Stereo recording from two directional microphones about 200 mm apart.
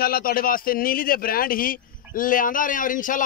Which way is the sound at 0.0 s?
45° left (ahead or behind).